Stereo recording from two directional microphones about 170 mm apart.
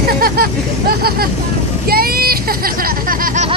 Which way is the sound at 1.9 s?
60° right (ahead or behind).